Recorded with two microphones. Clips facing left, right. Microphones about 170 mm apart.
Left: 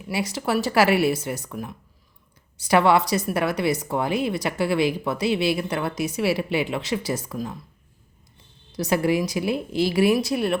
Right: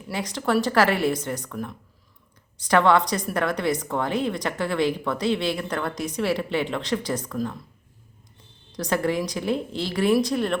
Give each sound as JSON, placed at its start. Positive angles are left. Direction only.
{"t": 0.1, "sound": "speech", "side_deg": 10}
{"t": 8.7, "sound": "speech", "side_deg": 10}